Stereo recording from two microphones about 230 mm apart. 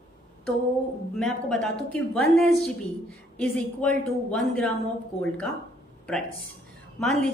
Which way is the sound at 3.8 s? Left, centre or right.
Centre.